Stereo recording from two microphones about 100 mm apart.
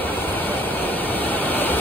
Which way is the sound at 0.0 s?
20° left (ahead or behind).